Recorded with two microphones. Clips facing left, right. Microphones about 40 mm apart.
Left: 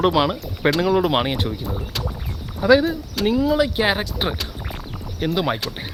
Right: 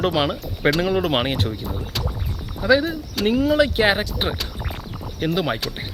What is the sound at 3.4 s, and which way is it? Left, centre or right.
Speech, right.